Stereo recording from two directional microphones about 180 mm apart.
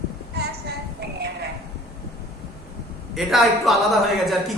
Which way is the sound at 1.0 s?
70° right (ahead or behind).